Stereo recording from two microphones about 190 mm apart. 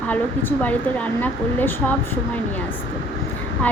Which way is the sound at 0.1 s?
10° left (ahead or behind).